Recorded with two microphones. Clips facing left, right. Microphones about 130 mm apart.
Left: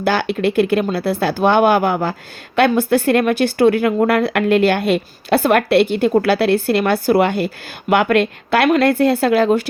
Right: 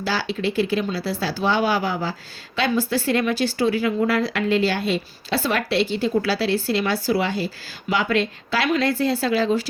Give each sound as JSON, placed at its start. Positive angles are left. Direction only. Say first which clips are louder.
{"t": 0.0, "sound": "speech", "louder": "left 7 dB", "side_deg": 60}